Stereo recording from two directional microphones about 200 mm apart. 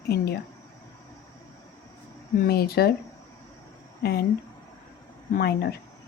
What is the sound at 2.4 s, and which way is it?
Speech, 50° left (ahead or behind).